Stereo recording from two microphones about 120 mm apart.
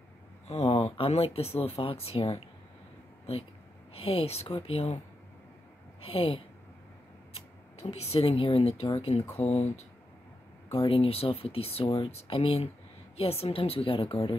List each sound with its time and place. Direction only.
0.5 s speech: 65° left (ahead or behind)
3.9 s speech: 55° left (ahead or behind)
6.0 s speech: 55° left (ahead or behind)
7.8 s speech: 60° left (ahead or behind)
9.4 s speech: 65° left (ahead or behind)
10.7 s speech: 50° left (ahead or behind)